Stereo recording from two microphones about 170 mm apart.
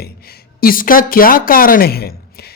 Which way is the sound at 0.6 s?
55° left (ahead or behind).